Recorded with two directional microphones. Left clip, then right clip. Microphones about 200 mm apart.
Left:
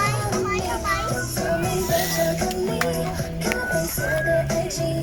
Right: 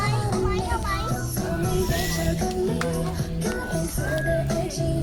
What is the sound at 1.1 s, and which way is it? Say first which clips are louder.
Music: left 5 dB; 15° left (ahead or behind).